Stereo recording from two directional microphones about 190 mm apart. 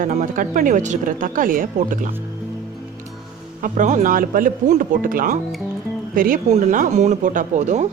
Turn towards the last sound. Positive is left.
turn(degrees=-40)  # may be behind; listen again after turning